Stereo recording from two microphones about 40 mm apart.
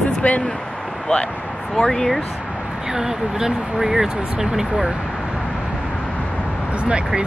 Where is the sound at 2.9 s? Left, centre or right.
Centre.